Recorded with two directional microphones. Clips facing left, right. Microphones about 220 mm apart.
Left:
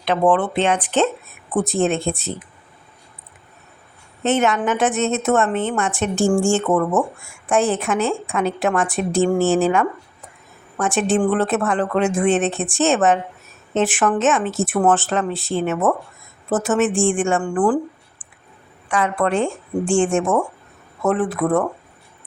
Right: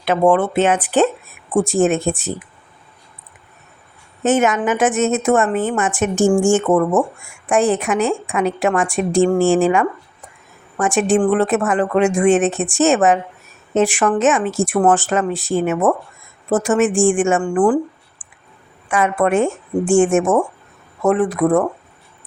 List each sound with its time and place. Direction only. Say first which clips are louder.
0.0 s a woman's voice: right 3 dB; 10° right (ahead or behind)
2.0 s speech: right 3 dB; 15° right (ahead or behind)
4.2 s a woman's voice: right 3 dB; centre (ahead or behind)
6.1 s speech: right 3 dB; 15° right (ahead or behind)
7.5 s a woman's voice: right 2 dB; centre (ahead or behind)
10.9 s a woman's voice: right 3 dB; centre (ahead or behind)
18.9 s a woman's voice: right 3 dB; 10° right (ahead or behind)
20.2 s speech: right 3 dB; 20° right (ahead or behind)
21.1 s a woman's voice: right 3 dB; centre (ahead or behind)